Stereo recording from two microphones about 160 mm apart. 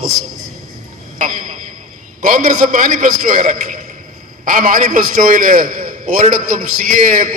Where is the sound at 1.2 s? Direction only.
60° right (ahead or behind).